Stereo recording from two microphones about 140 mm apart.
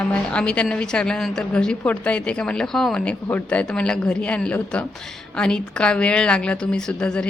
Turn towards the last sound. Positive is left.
turn(degrees=5)  # may be behind; listen again after turning